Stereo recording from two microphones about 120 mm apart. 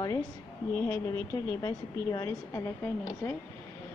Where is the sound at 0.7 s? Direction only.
20° left (ahead or behind).